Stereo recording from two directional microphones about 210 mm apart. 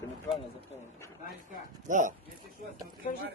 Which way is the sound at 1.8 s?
35° right (ahead or behind).